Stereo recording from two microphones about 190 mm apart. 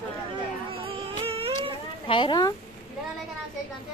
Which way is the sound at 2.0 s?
25° left (ahead or behind).